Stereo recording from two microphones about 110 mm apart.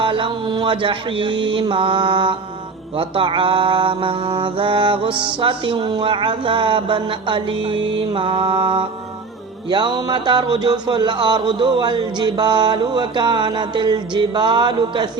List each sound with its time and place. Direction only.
0.0 s mantra: 50° right (ahead or behind)